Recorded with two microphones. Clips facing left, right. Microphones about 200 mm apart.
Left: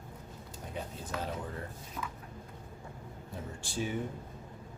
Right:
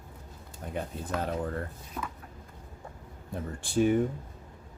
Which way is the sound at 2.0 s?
50° right (ahead or behind).